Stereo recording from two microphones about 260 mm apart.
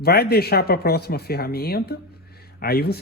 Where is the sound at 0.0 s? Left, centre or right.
Left.